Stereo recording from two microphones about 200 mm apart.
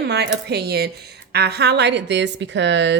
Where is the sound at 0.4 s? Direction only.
55° right (ahead or behind).